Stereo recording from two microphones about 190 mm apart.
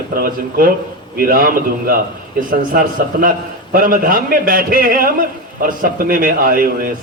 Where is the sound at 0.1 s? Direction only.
50° right (ahead or behind).